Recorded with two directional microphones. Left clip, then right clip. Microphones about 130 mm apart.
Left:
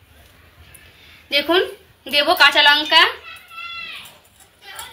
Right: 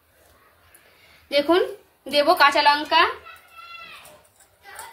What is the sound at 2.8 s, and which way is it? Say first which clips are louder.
Speech: left 5 dB; 15° left (ahead or behind).